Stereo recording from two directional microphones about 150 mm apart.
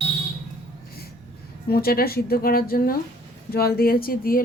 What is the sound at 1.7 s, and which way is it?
Speech, 90° left.